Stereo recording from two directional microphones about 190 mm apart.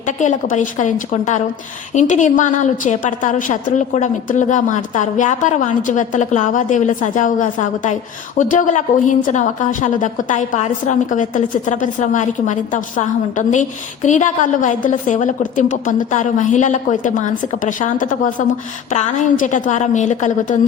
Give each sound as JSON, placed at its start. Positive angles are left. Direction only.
{"t": 0.2, "sound": "a woman's voice", "side_deg": 40}